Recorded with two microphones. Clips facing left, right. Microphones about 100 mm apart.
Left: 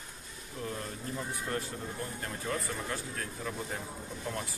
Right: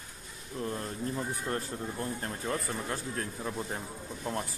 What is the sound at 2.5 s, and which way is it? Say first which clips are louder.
Speech: right 1 dB; 30° right (ahead or behind).